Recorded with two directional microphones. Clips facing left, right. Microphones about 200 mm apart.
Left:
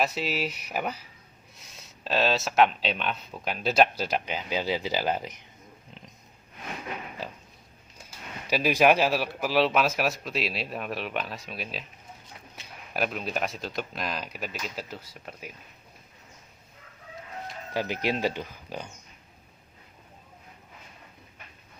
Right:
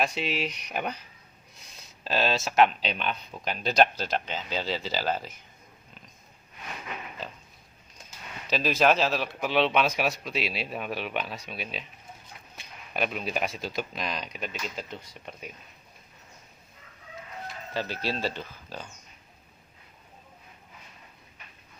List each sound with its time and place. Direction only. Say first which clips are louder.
0.0 s a man's voice: left 1 dB; 5° left (ahead or behind)
2.0 s a man's voice: left 1 dB; centre (ahead or behind); by 5.4 s 15° left (ahead or behind)
8.4 s a man's voice: left 2 dB; 10° left (ahead or behind)
12.9 s a man's voice: even; centre (ahead or behind)
17.7 s speech: left 3 dB; 15° left (ahead or behind)